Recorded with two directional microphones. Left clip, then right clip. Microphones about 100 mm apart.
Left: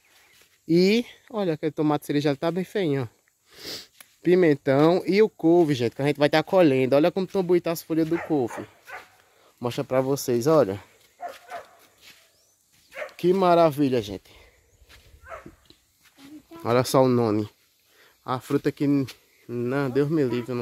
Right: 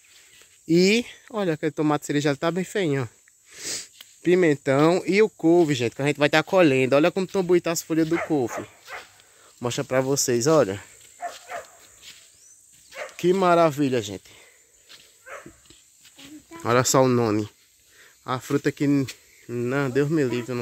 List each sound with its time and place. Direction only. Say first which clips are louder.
0.7 s speech: right 1 dB; 15° left (ahead or behind)
3.5 s sniff: right 3 dB; 30° left (ahead or behind)
4.2 s speech: even; 30° left (ahead or behind); by 8.5 s 5° left (ahead or behind)
9.6 s speech: right 1 dB; centre (ahead or behind)
13.1 s a sound: even; 15° left (ahead or behind)
16.2 s a sound: right 2 dB; 5° left (ahead or behind)
18.2 s speech: right 1 dB; 5° left (ahead or behind)